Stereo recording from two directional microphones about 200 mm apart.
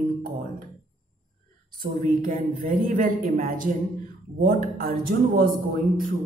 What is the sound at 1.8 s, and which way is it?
A woman's voice, 45° right (ahead or behind).